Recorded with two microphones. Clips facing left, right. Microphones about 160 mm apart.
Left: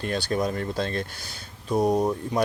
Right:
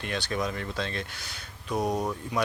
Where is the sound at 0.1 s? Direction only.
40° left (ahead or behind).